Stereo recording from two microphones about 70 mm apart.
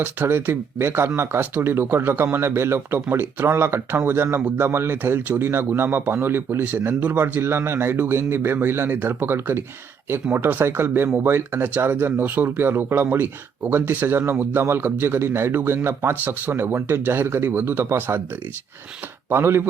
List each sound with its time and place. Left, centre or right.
0.0 s speech: right
19.3 s speech: right